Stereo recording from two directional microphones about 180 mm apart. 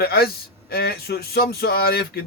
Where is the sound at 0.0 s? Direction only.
60° left (ahead or behind).